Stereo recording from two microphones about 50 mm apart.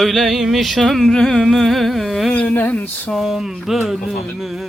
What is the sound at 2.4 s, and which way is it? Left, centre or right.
Speech, left.